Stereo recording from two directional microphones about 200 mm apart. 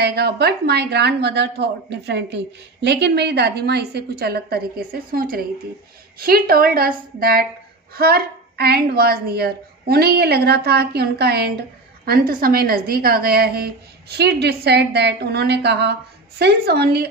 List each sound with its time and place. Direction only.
0.0 s a woman's voice: 55° right (ahead or behind)